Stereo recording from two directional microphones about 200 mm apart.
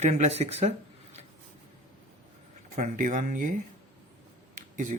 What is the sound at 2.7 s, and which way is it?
Speech, 40° right (ahead or behind).